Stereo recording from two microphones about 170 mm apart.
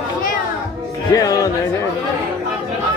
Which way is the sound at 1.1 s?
20° left (ahead or behind).